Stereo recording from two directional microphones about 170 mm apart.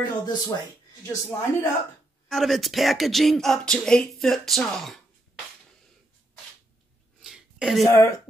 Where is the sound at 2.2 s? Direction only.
Centre (ahead or behind).